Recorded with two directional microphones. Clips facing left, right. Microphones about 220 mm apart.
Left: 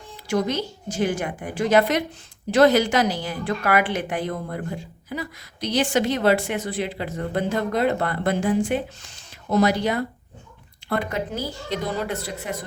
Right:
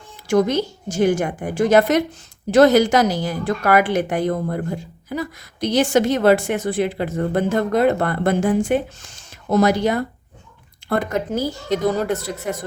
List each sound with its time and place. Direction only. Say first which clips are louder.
0.3 s a woman's voice: right 6 dB; 45° right (ahead or behind)